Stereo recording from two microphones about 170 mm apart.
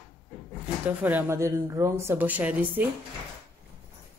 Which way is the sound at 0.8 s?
10° right (ahead or behind).